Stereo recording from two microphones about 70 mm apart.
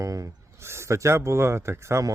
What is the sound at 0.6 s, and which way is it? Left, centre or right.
Speech, right.